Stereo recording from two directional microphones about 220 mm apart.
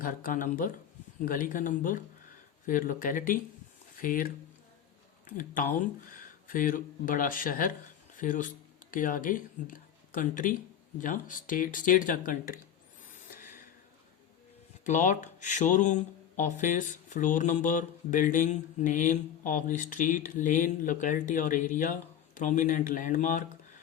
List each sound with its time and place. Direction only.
0.0 s speech: 40° left (ahead or behind)
6.1 s speech: 40° left (ahead or behind)
14.8 s speech: 35° left (ahead or behind)